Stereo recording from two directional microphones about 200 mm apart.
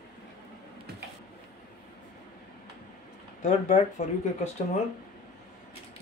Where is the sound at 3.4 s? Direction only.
35° left (ahead or behind).